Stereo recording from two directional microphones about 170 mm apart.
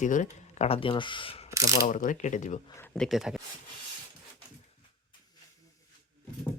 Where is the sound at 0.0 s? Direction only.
45° left (ahead or behind).